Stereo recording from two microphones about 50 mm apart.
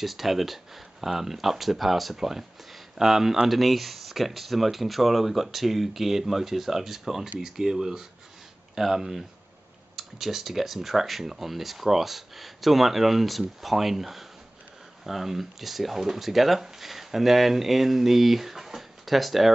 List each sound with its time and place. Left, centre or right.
0.0 s speech: centre